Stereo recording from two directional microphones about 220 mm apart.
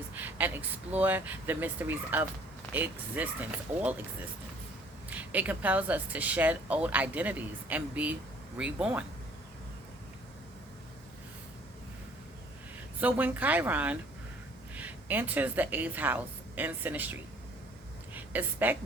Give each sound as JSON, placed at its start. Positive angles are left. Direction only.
{"t": 0.2, "sound": "speech", "side_deg": -10}
{"t": 5.0, "sound": "speech", "side_deg": -5}
{"t": 13.0, "sound": "a woman's voice", "side_deg": -5}